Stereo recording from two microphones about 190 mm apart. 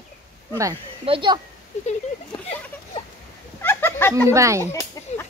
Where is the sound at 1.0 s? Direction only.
25° right (ahead or behind).